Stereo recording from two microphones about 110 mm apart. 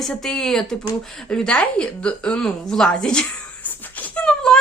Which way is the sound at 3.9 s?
15° left (ahead or behind).